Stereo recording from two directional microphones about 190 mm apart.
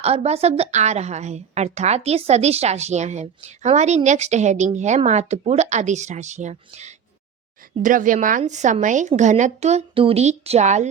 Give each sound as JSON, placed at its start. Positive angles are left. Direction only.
{"t": 0.0, "sound": "a woman's voice", "side_deg": -35}